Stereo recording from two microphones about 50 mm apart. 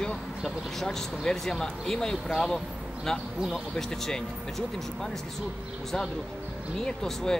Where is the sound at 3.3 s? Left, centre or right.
Centre.